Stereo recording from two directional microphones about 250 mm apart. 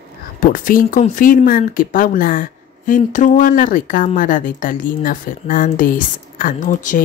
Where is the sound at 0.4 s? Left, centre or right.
Left.